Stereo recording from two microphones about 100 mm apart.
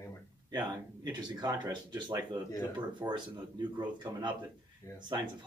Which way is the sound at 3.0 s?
25° right (ahead or behind).